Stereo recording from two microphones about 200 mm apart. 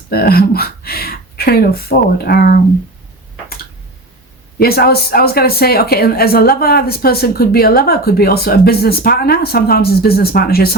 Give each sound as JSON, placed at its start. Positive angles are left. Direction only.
{"t": 0.1, "sound": "speech", "side_deg": 50}
{"t": 4.6, "sound": "a woman's voice", "side_deg": 50}